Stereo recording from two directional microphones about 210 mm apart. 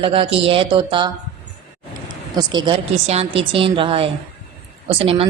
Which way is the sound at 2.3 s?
20° right (ahead or behind).